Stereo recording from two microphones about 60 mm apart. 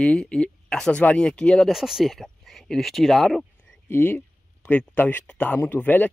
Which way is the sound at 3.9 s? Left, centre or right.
Left.